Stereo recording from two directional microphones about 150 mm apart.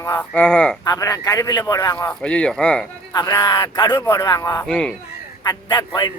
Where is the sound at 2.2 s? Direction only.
5° left (ahead or behind).